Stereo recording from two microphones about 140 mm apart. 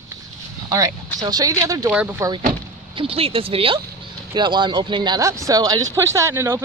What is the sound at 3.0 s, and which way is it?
Speech, 45° right (ahead or behind).